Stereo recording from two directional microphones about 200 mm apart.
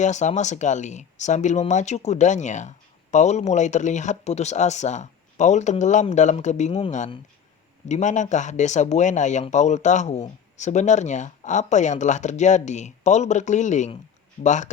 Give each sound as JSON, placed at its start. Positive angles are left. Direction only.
{"t": 0.0, "sound": "speech", "side_deg": 35}